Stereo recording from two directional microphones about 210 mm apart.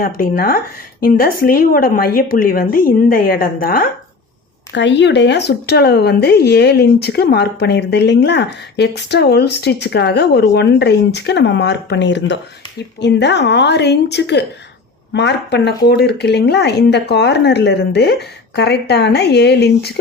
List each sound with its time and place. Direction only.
0.0 s speech: 45° left (ahead or behind)
4.7 s a woman's voice: 60° left (ahead or behind)